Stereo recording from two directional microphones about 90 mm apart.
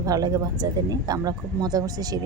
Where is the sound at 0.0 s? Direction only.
45° right (ahead or behind).